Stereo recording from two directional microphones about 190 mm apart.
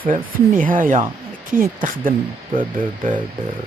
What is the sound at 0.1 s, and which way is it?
Speech, 45° right (ahead or behind).